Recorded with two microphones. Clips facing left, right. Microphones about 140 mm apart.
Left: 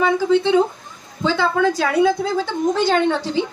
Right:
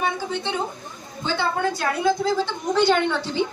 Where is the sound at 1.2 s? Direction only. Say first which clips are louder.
Left 6 dB; 90° left.